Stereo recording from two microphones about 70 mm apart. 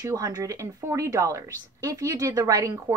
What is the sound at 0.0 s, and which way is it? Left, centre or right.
A woman's voice, right.